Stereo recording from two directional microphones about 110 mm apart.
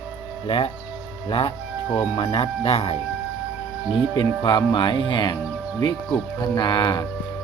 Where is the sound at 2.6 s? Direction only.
60° left (ahead or behind).